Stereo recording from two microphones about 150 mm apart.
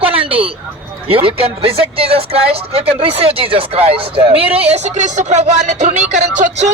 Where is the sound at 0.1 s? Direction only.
40° right (ahead or behind).